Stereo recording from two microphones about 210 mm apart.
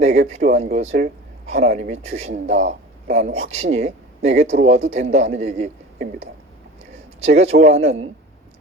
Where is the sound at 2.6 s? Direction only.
30° right (ahead or behind).